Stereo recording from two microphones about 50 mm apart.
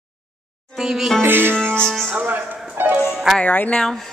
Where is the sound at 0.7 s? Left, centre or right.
Centre.